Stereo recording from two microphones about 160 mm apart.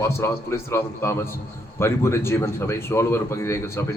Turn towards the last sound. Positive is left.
turn(degrees=15)  # may be behind; listen again after turning